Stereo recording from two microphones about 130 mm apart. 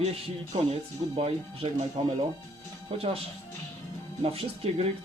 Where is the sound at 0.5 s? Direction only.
45° right (ahead or behind).